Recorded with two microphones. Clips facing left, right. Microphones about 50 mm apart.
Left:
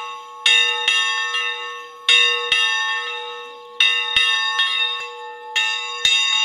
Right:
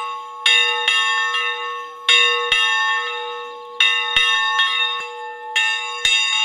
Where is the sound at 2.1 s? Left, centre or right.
Centre.